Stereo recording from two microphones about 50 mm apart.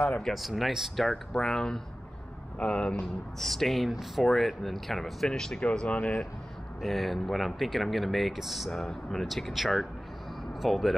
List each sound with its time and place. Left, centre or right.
0.2 s speech: centre
1.0 s speech: centre
3.4 s speech: centre
5.6 s speech: left
6.8 s speech: centre
9.3 s speech: centre